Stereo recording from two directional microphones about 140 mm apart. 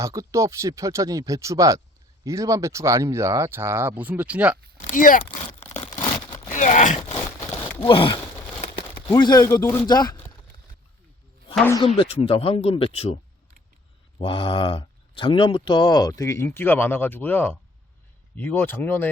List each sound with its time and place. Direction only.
0.0 s speech: 25° right (ahead or behind)
4.8 s speech: 70° left (ahead or behind)
6.5 s speech: 65° left (ahead or behind)
7.0 s a sound: 15° left (ahead or behind)
7.8 s speech: 40° left (ahead or behind); by 9.8 s 20° left (ahead or behind)
9.8 s speech: 30° left (ahead or behind)
11.9 s speech: 45° left (ahead or behind)
14.2 s speech: 35° left (ahead or behind); by 19.1 s 15° left (ahead or behind)